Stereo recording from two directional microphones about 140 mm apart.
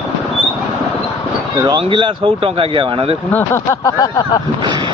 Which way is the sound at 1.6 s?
35° right (ahead or behind).